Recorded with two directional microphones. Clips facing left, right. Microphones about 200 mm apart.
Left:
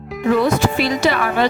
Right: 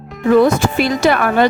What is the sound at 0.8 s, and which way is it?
Speech, 50° right (ahead or behind).